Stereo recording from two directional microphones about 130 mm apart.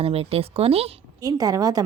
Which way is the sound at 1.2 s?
25° right (ahead or behind).